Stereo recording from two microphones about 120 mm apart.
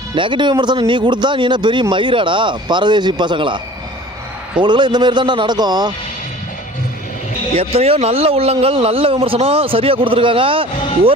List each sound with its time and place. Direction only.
0.2 s speech: 40° right (ahead or behind)
4.6 s speech: 40° right (ahead or behind)
7.5 s a man's voice: 55° right (ahead or behind)